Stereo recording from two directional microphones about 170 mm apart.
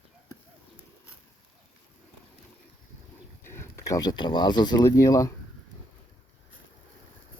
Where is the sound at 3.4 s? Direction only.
15° left (ahead or behind).